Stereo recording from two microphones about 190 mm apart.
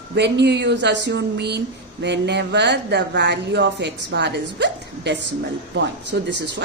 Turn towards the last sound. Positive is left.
turn(degrees=-65)  # may be behind; listen again after turning